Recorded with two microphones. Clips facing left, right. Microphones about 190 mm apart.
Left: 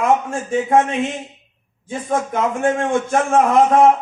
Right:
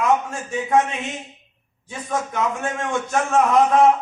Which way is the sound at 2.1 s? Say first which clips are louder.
Left 4 dB; 50° left (ahead or behind).